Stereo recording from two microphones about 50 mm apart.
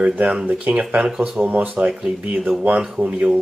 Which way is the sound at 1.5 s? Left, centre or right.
Right.